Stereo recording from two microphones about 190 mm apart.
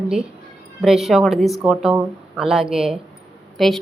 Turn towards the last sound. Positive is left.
turn(degrees=0)  # may be behind; listen again after turning